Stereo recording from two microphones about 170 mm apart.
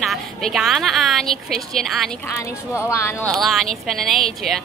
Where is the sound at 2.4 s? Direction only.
15° left (ahead or behind).